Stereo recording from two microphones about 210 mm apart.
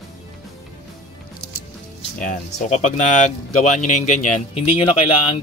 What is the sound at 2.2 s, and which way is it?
Speech, 35° left (ahead or behind).